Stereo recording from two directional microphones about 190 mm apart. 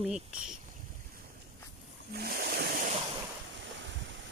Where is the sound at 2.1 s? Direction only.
55° right (ahead or behind).